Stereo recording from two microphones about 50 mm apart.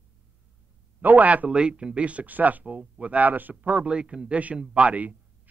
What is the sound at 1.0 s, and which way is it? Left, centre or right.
Speech, right.